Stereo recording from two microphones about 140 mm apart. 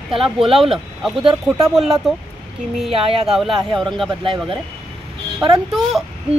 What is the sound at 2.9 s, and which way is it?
Speech, 40° right (ahead or behind).